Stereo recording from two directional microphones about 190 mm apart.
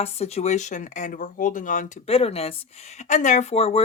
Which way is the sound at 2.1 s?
30° left (ahead or behind).